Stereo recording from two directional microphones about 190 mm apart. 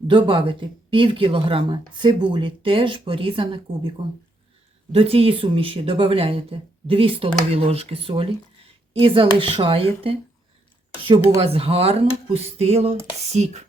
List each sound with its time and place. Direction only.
0.1 s speech: 25° right (ahead or behind)
11.3 s speech: 30° right (ahead or behind)